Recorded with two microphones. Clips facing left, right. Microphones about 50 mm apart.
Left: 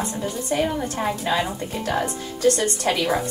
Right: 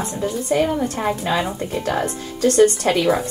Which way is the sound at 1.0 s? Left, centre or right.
Centre.